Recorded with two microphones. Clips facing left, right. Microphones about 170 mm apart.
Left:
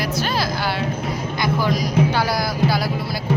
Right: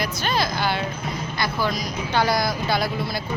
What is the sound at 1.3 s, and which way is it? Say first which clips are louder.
A woman's voice: left 4 dB; 15° left (ahead or behind).